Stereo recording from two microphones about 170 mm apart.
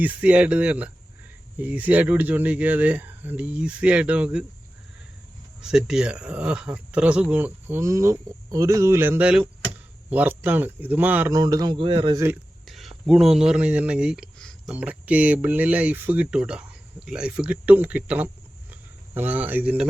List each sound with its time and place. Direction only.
0.0 s speech: 5° right (ahead or behind)
5.6 s speech: 5° right (ahead or behind)
11.3 s speech: 25° right (ahead or behind)
12.1 s speech: 15° right (ahead or behind)
12.6 s speech: centre (ahead or behind)